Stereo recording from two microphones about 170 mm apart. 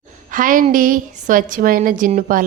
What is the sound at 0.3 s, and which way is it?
A woman's voice, 50° right (ahead or behind).